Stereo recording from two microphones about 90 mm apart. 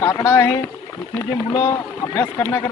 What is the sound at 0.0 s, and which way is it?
Speech, 35° left (ahead or behind).